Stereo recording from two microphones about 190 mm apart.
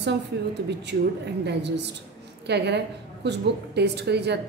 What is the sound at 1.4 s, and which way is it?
A woman's voice, 65° right (ahead or behind).